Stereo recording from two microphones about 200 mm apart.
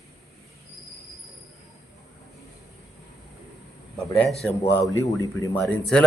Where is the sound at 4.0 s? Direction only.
5° left (ahead or behind).